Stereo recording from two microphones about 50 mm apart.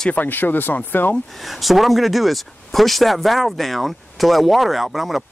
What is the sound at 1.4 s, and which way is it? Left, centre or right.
Speech, centre.